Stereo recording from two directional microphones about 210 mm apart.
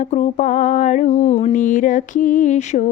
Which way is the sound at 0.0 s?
35° left (ahead or behind).